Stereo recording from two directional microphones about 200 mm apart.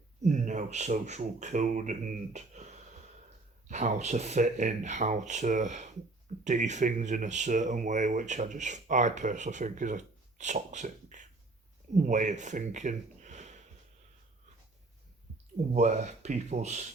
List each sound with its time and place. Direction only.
0.2 s speech: 35° right (ahead or behind)
15.7 s speech: 35° right (ahead or behind)